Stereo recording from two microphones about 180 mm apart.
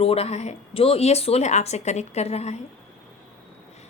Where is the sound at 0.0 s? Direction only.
35° left (ahead or behind).